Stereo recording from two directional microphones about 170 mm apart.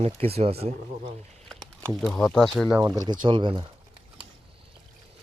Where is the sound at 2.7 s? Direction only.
20° right (ahead or behind).